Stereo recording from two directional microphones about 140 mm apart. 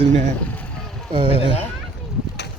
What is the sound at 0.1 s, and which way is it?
Speech, 60° right (ahead or behind).